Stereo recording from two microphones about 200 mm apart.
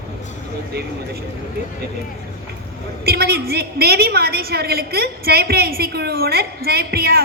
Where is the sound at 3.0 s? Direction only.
50° right (ahead or behind).